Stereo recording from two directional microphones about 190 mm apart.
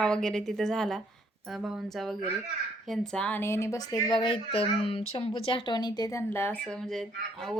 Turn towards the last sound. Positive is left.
turn(degrees=5)  # may be behind; listen again after turning